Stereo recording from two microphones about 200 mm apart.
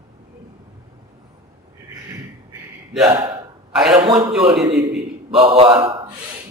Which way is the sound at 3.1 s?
25° right (ahead or behind).